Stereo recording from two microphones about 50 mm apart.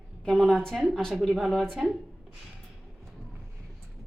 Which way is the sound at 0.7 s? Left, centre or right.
Centre.